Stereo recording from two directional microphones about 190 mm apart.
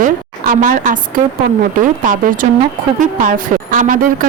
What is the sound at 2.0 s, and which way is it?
Speech, 45° right (ahead or behind).